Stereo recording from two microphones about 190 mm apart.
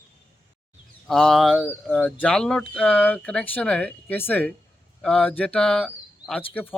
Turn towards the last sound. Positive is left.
turn(degrees=5)  # may be behind; listen again after turning